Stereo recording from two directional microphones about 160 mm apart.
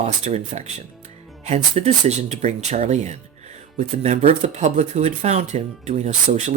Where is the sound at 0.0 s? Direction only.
40° right (ahead or behind).